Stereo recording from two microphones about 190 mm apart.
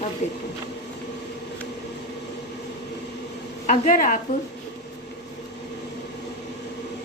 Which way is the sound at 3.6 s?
40° left (ahead or behind).